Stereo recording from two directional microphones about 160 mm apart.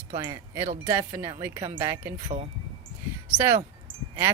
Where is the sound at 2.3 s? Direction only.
35° right (ahead or behind).